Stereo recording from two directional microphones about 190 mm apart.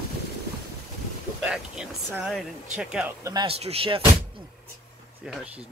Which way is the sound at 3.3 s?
25° right (ahead or behind).